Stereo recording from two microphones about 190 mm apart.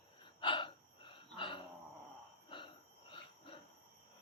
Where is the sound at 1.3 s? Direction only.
25° left (ahead or behind).